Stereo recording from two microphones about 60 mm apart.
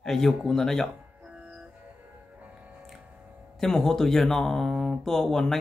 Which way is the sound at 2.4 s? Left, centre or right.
Right.